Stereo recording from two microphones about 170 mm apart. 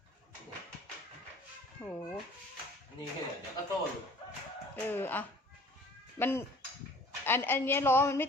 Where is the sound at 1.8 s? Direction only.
15° left (ahead or behind).